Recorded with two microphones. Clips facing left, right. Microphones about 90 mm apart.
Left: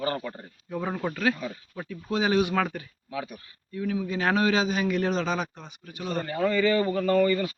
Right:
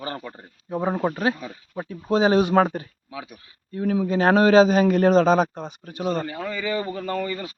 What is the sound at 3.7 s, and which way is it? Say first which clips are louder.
A man's voice: right 7 dB; 45° right (ahead or behind).